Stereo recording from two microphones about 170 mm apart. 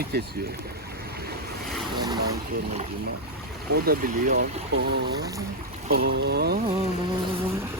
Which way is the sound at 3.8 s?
55° right (ahead or behind).